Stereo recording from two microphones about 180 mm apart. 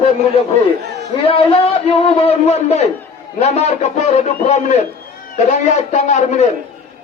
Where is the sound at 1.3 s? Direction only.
35° left (ahead or behind).